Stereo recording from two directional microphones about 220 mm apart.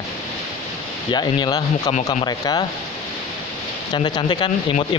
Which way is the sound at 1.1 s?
20° left (ahead or behind).